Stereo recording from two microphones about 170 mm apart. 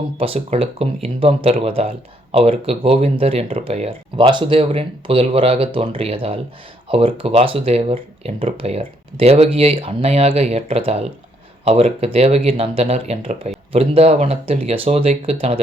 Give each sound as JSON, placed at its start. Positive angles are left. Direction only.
{"t": 0.2, "sound": "speech", "side_deg": -35}